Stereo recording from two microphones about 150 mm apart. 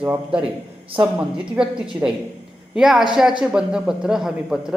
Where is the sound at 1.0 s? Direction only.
5° right (ahead or behind).